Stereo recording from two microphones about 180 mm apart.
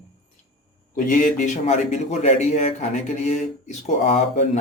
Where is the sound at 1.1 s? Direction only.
45° left (ahead or behind).